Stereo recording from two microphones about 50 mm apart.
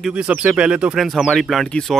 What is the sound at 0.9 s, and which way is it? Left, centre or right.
Speech, centre.